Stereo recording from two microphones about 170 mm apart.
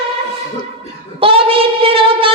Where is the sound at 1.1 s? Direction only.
35° right (ahead or behind).